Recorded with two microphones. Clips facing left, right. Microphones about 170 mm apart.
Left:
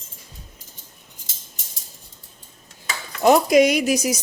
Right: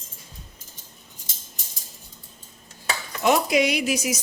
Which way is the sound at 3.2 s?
40° left (ahead or behind).